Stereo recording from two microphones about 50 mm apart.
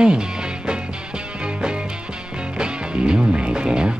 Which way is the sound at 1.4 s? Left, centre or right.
Centre.